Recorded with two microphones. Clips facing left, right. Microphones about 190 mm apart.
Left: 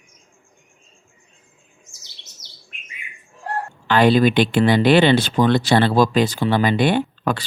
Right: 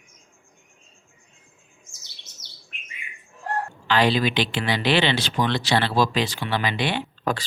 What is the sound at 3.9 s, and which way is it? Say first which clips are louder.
Speech: left 6 dB; 50° left (ahead or behind).